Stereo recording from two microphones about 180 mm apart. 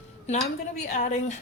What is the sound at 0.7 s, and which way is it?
Speech, 40° left (ahead or behind).